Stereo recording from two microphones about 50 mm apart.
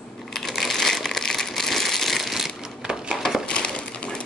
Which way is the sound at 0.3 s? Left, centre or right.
Centre.